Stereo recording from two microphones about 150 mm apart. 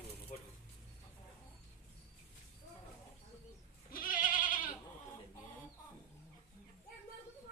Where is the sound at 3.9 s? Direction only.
65° left (ahead or behind).